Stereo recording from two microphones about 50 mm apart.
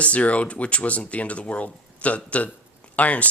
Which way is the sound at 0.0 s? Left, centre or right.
Left.